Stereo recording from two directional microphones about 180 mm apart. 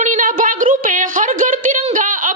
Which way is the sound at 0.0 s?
45° right (ahead or behind).